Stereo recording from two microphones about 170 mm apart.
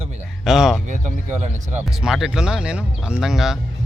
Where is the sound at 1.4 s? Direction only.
45° right (ahead or behind).